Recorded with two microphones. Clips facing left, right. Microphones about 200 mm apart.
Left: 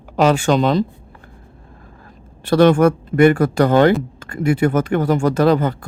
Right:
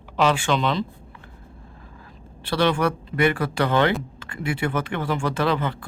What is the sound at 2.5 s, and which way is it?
Speech, 45° left (ahead or behind).